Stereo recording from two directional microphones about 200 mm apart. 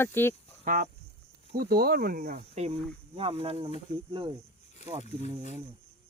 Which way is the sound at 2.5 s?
30° right (ahead or behind).